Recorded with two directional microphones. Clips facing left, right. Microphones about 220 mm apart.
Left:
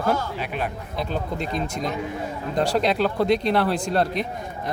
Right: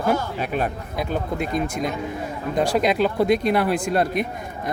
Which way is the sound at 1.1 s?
10° right (ahead or behind).